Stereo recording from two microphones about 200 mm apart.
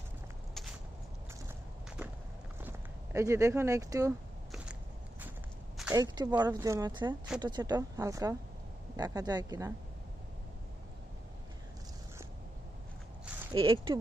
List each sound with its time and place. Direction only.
2.6 s speech: 10° right (ahead or behind)
5.9 s speech: 20° right (ahead or behind)
13.5 s speech: 25° right (ahead or behind)